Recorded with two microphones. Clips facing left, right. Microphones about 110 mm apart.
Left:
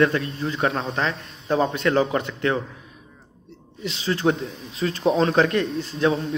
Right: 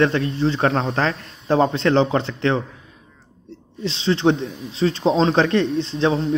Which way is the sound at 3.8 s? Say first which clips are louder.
Right 4 dB; 25° right (ahead or behind).